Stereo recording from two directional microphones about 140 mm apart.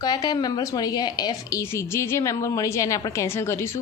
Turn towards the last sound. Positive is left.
turn(degrees=20)  # may be behind; listen again after turning